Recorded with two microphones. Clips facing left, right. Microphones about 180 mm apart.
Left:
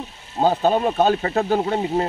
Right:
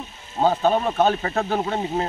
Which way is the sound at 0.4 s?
20° left (ahead or behind).